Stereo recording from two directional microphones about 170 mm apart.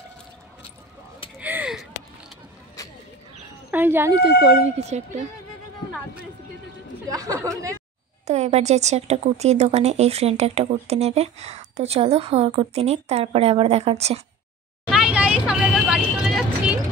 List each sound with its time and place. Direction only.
1.4 s a sound: 10° right (ahead or behind)
2.8 s a sound: 20° left (ahead or behind)
3.7 s speech: 10° right (ahead or behind)
4.2 s speech: 40° right (ahead or behind)
7.1 s speech: 20° right (ahead or behind)
8.3 s speech: 40° right (ahead or behind)
14.9 s vehicle: 5° right (ahead or behind)